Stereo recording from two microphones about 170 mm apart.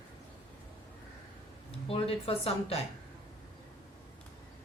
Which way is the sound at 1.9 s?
35° left (ahead or behind).